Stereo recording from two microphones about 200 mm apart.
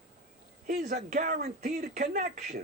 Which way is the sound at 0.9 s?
35° right (ahead or behind).